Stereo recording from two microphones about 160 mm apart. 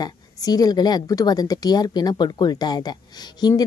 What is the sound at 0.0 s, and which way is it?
A woman's voice, 25° left (ahead or behind).